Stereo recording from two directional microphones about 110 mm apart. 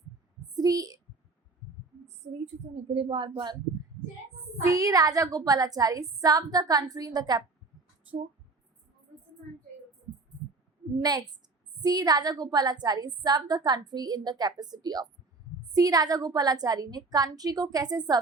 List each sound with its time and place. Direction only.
0.5 s a child's voice: 35° right (ahead or behind)
2.9 s a woman's voice: 55° right (ahead or behind)
4.6 s a woman's voice: 30° right (ahead or behind)
11.8 s a woman's voice: 35° right (ahead or behind)